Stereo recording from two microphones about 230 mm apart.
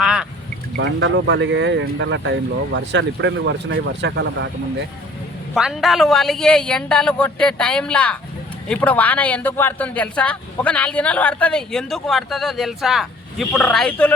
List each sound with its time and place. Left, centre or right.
0.0 s a sound: centre
0.8 s speech: right
5.5 s speech: centre